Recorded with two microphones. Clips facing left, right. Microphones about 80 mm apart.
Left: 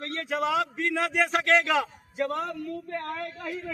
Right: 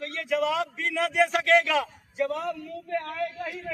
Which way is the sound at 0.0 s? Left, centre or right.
Left.